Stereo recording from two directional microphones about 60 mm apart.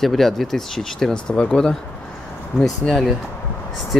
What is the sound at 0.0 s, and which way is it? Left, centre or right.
Speech, centre.